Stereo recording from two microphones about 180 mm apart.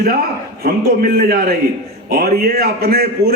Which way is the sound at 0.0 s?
55° right (ahead or behind).